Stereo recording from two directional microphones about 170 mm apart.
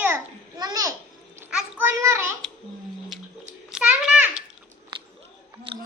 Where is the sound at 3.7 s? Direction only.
5° right (ahead or behind).